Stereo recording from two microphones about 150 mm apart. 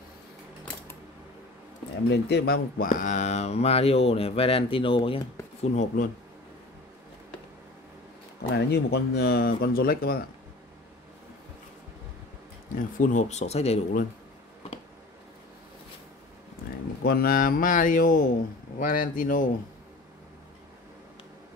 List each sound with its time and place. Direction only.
2.2 s speech: 90° left; by 5.2 s 35° left (ahead or behind)
5.6 s speech: 50° left (ahead or behind)
8.4 s speech: 90° left
12.7 s speech: 60° left (ahead or behind); by 13.7 s 45° left (ahead or behind)
17.0 s speech: 85° left; by 19.5 s 65° left (ahead or behind)